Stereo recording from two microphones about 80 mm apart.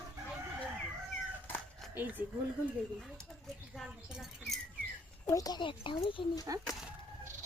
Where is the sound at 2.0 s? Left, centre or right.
Right.